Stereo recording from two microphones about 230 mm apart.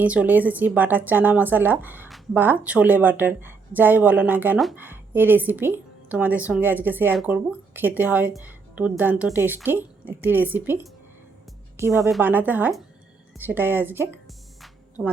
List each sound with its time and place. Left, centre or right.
0.0 s speech: centre
14.6 s music: centre